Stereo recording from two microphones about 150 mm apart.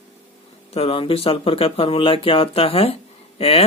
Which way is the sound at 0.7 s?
40° left (ahead or behind).